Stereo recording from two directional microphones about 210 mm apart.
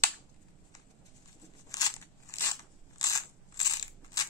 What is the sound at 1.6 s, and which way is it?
Crackle, 15° left (ahead or behind).